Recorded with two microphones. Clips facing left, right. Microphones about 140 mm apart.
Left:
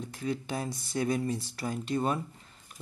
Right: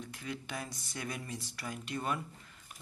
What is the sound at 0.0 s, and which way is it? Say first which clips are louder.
Speech: left 8 dB; 35° left (ahead or behind).